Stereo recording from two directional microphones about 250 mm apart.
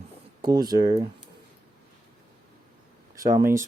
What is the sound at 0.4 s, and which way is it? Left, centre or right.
Speech, centre.